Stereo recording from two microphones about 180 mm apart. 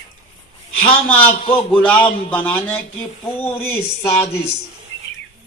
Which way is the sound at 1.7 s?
5° left (ahead or behind).